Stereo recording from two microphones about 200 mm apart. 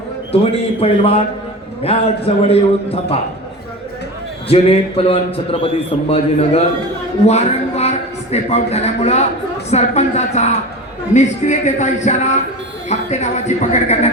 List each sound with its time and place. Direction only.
0.3 s a man's voice: 30° left (ahead or behind)
4.4 s a man's voice: 30° left (ahead or behind)